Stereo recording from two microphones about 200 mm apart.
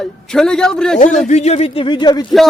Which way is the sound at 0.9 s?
35° left (ahead or behind).